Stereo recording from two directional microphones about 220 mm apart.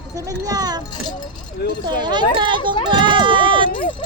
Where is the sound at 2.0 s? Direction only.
20° right (ahead or behind).